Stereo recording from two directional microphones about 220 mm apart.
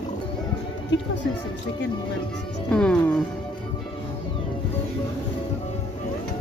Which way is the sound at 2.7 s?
5° left (ahead or behind).